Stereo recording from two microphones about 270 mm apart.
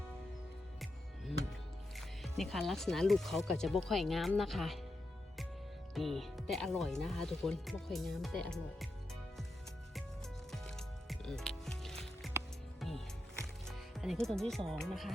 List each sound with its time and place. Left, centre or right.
2.0 s speech: centre
5.9 s speech: centre
10.5 s music: centre
13.7 s speech: centre